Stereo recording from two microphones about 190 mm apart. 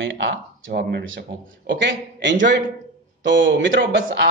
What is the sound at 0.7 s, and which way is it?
Speech, 55° right (ahead or behind).